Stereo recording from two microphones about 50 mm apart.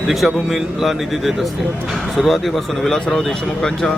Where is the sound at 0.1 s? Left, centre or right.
Centre.